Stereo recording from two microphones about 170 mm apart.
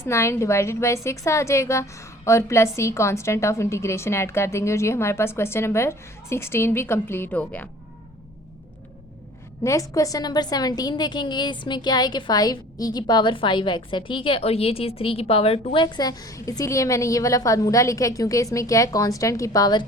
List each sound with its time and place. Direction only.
0.0 s a woman's voice: 15° left (ahead or behind)
9.9 s a woman's voice: 20° left (ahead or behind)